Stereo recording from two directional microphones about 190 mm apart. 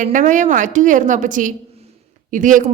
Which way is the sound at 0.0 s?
45° right (ahead or behind).